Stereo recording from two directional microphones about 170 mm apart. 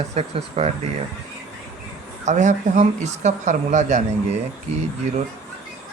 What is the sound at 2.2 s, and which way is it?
Speech, 45° right (ahead or behind).